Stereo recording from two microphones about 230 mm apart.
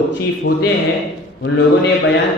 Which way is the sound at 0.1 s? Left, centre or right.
Left.